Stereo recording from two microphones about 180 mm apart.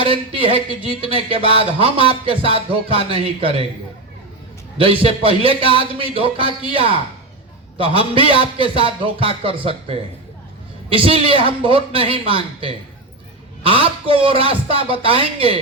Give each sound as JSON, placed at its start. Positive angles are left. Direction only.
{"t": 0.0, "sound": "speech", "side_deg": -30}
{"t": 4.8, "sound": "a man's voice", "side_deg": -30}